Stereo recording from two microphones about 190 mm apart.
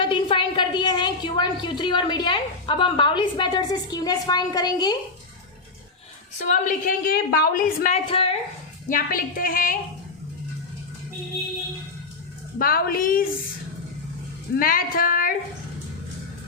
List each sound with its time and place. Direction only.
0.0 s a sound: 25° left (ahead or behind)
1.8 s a woman's voice: 25° left (ahead or behind)
6.5 s a woman's voice: 45° left (ahead or behind)
8.1 s speech: 30° left (ahead or behind)
8.9 s a woman's voice: 50° left (ahead or behind)
12.5 s a woman's voice: 50° left (ahead or behind)
14.5 s a woman's voice: 50° left (ahead or behind)